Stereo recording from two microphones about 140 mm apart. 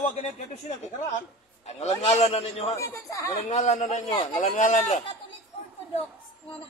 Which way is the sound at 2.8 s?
25° left (ahead or behind).